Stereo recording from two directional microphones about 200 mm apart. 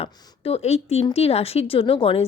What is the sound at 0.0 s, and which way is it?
A woman's voice, 20° left (ahead or behind).